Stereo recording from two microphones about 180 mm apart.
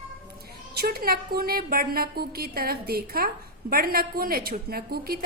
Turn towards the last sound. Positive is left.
turn(degrees=-55)  # may be behind; listen again after turning